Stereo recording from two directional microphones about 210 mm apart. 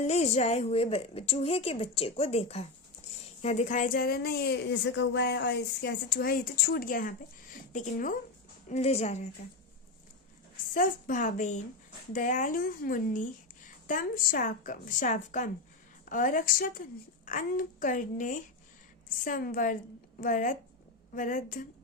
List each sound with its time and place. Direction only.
0.0 s a woman's voice: 30° left (ahead or behind)
10.8 s speech: 40° left (ahead or behind)